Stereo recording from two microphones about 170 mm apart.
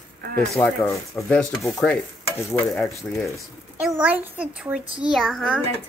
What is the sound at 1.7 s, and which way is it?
Stir, 5° left (ahead or behind).